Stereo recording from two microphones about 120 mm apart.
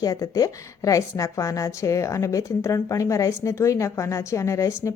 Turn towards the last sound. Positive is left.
turn(degrees=25)  # may be behind; listen again after turning